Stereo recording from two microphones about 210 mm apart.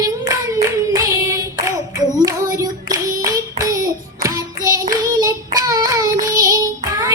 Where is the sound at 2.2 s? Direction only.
15° right (ahead or behind).